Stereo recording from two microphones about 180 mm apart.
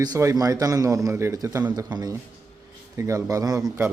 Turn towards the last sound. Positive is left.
turn(degrees=-20)  # may be behind; listen again after turning